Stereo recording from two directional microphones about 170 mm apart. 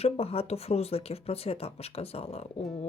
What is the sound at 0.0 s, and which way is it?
Speech, 35° left (ahead or behind).